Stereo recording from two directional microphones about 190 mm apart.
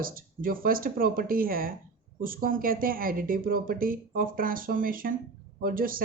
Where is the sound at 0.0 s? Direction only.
50° right (ahead or behind).